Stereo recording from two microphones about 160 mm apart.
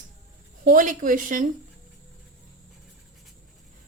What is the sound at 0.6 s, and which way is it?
Speech, 55° right (ahead or behind).